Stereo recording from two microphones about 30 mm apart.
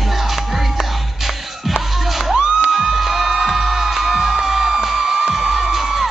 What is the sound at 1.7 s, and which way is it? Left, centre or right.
Music, centre.